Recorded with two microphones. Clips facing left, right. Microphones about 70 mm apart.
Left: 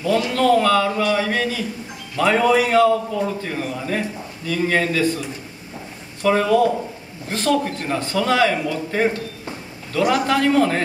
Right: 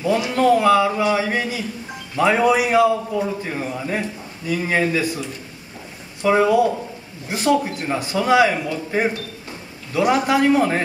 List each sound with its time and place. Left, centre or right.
0.0 s a man's voice: centre
6.2 s a man's voice: centre